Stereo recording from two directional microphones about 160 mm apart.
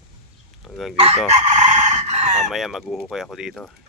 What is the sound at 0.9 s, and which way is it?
Chicken, 40° right (ahead or behind).